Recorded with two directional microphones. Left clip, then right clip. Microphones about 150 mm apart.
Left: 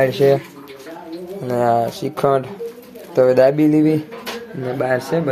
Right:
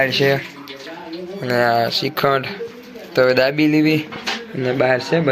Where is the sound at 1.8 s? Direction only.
20° left (ahead or behind).